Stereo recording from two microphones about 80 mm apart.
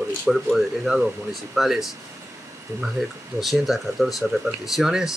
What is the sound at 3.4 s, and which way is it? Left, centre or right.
Speech, centre.